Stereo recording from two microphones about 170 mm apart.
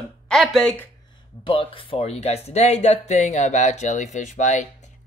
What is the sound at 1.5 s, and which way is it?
Speech, 35° left (ahead or behind).